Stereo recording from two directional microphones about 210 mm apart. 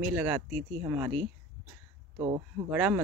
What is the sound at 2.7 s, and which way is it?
Speech, 5° right (ahead or behind).